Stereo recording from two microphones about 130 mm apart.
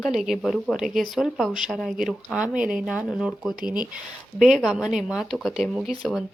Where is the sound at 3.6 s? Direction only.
90° right.